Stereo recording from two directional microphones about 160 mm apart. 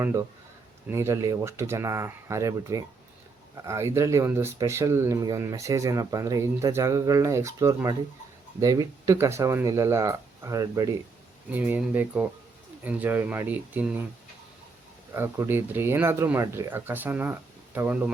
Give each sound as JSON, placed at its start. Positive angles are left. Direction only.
{"t": 0.0, "sound": "speech", "side_deg": -20}
{"t": 15.1, "sound": "speech", "side_deg": -15}